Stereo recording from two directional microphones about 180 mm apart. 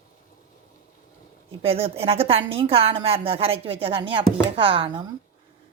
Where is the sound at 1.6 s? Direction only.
35° right (ahead or behind).